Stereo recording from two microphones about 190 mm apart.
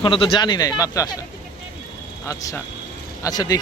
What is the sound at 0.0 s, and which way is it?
Speech, 25° left (ahead or behind).